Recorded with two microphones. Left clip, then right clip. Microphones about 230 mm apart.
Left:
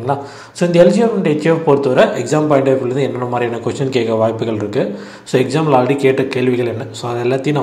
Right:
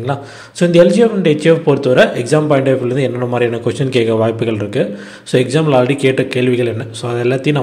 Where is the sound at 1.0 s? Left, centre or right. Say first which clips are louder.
Right 3 dB; right.